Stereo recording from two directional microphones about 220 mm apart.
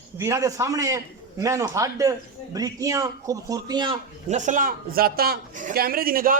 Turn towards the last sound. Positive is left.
turn(degrees=-40)  # may be behind; listen again after turning